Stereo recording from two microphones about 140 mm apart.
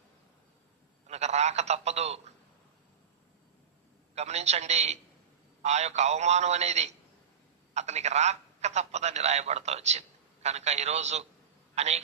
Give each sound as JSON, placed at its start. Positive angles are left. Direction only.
{"t": 1.0, "sound": "a man's voice", "side_deg": -50}
{"t": 4.1, "sound": "a man's voice", "side_deg": -50}